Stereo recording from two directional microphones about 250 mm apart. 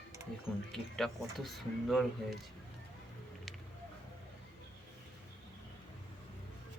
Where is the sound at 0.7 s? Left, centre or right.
Centre.